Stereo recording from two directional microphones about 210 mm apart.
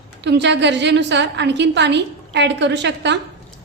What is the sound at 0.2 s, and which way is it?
A woman's voice, 55° right (ahead or behind).